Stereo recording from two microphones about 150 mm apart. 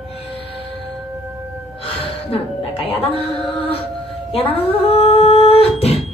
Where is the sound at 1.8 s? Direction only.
40° left (ahead or behind).